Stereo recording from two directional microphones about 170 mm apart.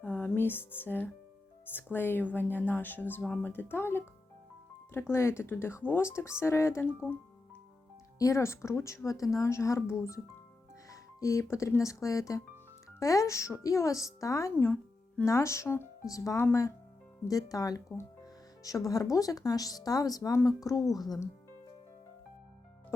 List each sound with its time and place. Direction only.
0.0 s speech: 10° left (ahead or behind)
8.2 s speech: 15° left (ahead or behind)
11.2 s speech: 20° left (ahead or behind)